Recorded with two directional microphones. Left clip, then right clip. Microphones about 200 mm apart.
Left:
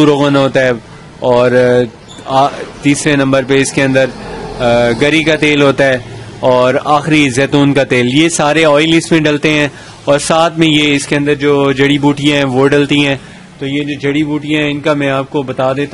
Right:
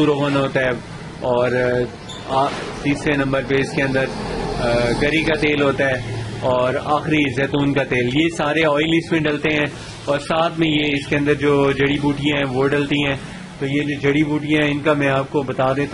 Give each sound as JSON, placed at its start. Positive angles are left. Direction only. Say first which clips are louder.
{"t": 0.0, "sound": "a man's voice", "louder": "left 9 dB", "side_deg": 45}